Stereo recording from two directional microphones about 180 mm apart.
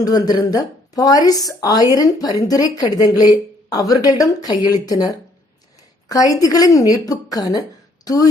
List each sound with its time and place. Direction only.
0.0 s a woman's voice: 20° left (ahead or behind)